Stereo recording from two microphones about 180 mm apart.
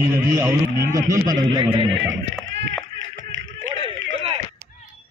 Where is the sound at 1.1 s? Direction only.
20° right (ahead or behind).